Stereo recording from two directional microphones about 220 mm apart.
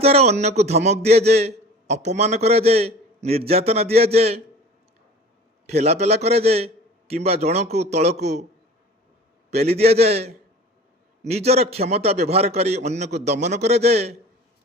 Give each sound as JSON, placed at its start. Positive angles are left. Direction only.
{"t": 0.0, "sound": "a man's voice", "side_deg": -30}
{"t": 5.6, "sound": "a man's voice", "side_deg": -30}
{"t": 9.5, "sound": "a man's voice", "side_deg": -30}